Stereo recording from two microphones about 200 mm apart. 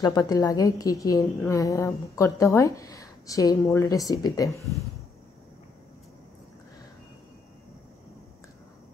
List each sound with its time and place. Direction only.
0.0 s speech: 20° left (ahead or behind)